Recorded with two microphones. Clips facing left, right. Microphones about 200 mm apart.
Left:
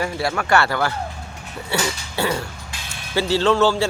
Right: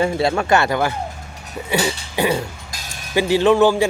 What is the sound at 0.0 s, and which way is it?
Speech, 25° right (ahead or behind).